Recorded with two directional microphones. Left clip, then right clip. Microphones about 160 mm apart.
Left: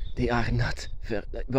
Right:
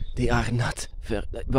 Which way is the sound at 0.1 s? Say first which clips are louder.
Right 1 dB; 20° right (ahead or behind).